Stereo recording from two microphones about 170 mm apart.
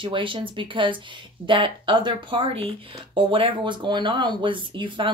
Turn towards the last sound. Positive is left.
turn(degrees=-30)  # may be behind; listen again after turning